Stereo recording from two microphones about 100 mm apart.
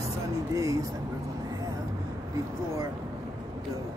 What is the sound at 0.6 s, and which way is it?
Speech, 35° right (ahead or behind).